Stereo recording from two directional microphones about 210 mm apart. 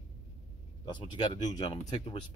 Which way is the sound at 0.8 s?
20° left (ahead or behind).